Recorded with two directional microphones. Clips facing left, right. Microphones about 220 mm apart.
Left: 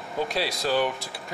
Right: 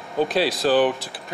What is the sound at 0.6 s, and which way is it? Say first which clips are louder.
Speech: right 6 dB; 30° right (ahead or behind).